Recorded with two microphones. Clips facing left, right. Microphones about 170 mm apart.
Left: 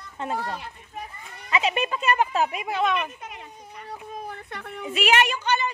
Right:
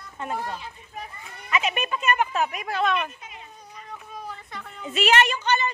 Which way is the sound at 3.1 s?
70° left (ahead or behind).